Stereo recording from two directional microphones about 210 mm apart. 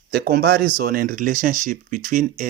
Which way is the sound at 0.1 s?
45° right (ahead or behind).